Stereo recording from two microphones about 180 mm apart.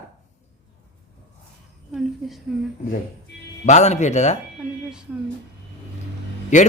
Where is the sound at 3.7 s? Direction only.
40° left (ahead or behind).